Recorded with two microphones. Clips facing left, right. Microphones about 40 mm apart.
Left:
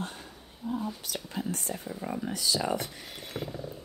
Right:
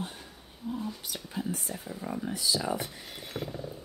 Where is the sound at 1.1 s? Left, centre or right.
Centre.